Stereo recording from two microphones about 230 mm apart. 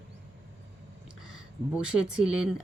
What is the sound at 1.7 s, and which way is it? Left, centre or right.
Speech, centre.